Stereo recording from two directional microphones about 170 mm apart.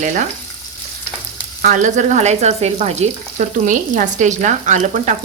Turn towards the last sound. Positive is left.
turn(degrees=-45)  # may be behind; listen again after turning